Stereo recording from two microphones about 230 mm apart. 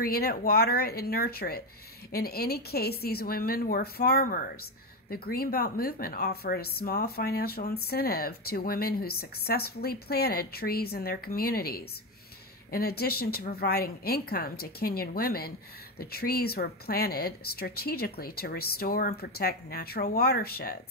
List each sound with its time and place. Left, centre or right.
0.0 s speech: left